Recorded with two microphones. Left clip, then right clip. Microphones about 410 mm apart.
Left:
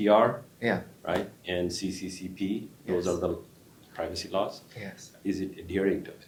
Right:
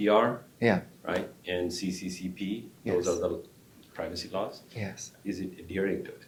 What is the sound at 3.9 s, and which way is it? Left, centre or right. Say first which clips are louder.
Speech: left 3 dB; left.